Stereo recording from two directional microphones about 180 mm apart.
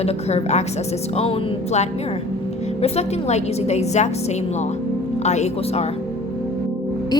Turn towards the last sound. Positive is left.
turn(degrees=40)  # may be behind; listen again after turning